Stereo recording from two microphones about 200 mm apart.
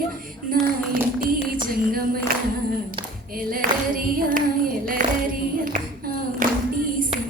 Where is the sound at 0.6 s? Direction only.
45° right (ahead or behind).